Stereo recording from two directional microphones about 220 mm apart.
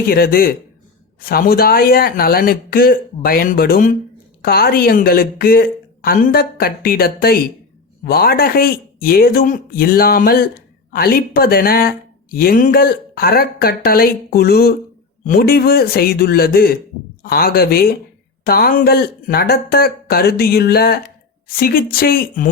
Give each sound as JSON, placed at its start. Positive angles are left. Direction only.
{"t": 0.1, "sound": "speech", "side_deg": 40}